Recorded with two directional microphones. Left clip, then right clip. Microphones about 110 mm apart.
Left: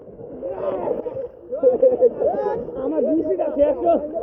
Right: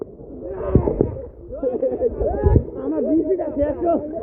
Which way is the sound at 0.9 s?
15° right (ahead or behind).